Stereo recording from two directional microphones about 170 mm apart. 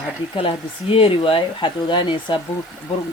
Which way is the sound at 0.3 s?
30° left (ahead or behind).